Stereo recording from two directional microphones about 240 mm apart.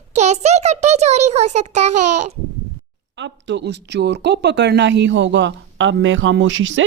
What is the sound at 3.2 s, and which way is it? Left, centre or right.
Speech, right.